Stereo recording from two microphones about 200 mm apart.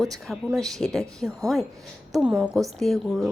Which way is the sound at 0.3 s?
5° right (ahead or behind).